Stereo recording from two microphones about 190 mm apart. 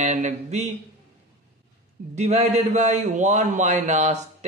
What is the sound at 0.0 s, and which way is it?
Speech, 40° right (ahead or behind).